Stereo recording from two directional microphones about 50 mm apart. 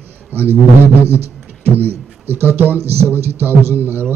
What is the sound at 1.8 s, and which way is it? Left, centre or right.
Speech, right.